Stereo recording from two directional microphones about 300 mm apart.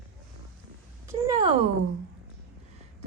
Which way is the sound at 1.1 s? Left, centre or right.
Centre.